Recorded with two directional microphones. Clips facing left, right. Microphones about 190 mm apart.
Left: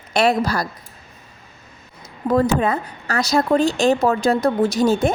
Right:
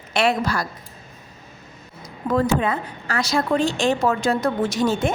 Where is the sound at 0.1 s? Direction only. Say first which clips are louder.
Left 3 dB; 40° left (ahead or behind).